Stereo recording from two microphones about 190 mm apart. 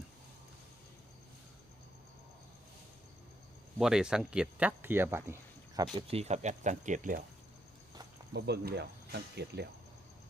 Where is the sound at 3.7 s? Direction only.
5° right (ahead or behind).